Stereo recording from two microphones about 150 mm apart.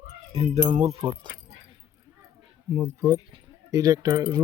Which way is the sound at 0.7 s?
50° right (ahead or behind).